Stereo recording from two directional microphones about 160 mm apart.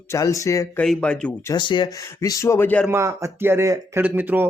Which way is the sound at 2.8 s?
15° right (ahead or behind).